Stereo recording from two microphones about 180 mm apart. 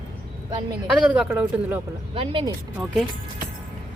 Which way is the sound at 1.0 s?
5° right (ahead or behind).